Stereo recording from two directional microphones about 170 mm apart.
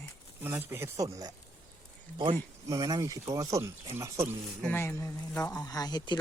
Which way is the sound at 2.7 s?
20° right (ahead or behind).